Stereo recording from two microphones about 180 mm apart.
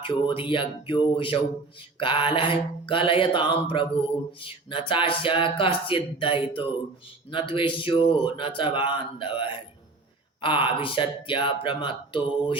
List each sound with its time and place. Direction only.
0.0 s speech: 30° left (ahead or behind)